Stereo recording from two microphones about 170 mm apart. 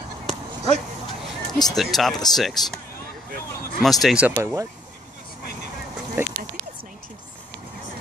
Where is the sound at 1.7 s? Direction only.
Centre (ahead or behind).